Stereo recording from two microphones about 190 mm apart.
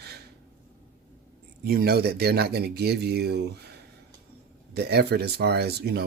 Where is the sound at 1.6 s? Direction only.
55° right (ahead or behind).